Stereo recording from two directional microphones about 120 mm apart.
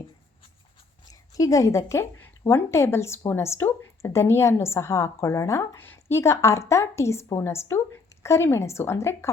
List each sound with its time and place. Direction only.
1.3 s speech: 25° left (ahead or behind)